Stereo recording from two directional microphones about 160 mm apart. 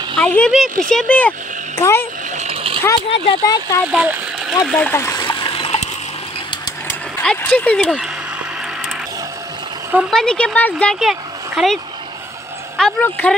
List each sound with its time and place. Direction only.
0.1 s a sound: 5° left (ahead or behind)
0.5 s speech: centre (ahead or behind); by 2.0 s 15° left (ahead or behind)
2.3 s a sound: 40° right (ahead or behind)
3.4 s speech: 25° left (ahead or behind)
3.9 s speech: 10° right (ahead or behind)
4.6 s speech: 5° left (ahead or behind)
5.2 s splash: 30° left (ahead or behind)
6.9 s speech: 10° left (ahead or behind)
10.1 s speech: 5° left (ahead or behind)